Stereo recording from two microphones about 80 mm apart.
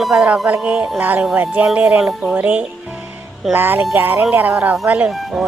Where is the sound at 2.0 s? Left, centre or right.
Centre.